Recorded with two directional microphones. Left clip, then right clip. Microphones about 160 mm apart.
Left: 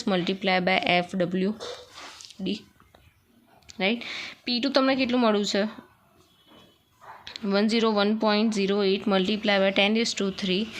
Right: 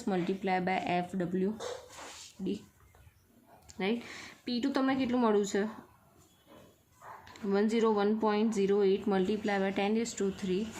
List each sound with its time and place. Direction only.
0.0 s speech: 25° left (ahead or behind)
3.7 s speech: 25° left (ahead or behind)
7.3 s speech: 25° left (ahead or behind)